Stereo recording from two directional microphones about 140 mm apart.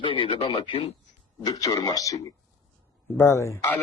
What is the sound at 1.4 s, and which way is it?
A man's voice, 25° left (ahead or behind).